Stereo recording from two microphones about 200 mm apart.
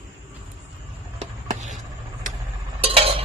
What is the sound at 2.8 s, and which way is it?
Stir, 30° right (ahead or behind).